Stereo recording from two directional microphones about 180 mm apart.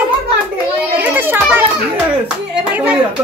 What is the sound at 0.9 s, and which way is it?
Children playing, 10° right (ahead or behind).